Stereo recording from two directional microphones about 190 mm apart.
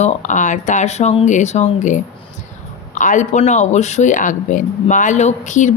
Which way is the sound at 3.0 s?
40° left (ahead or behind).